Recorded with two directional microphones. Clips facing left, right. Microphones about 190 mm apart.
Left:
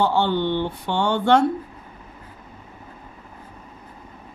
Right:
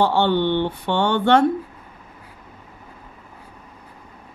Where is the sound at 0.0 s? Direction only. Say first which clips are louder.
Right 2 dB; 65° right (ahead or behind).